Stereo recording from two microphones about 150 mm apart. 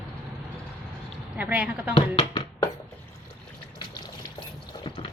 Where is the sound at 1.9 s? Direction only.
35° left (ahead or behind).